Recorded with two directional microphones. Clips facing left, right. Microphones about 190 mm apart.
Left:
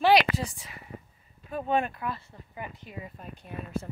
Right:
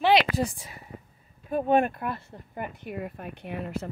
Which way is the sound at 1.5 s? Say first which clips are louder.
Right 5 dB; 50° right (ahead or behind).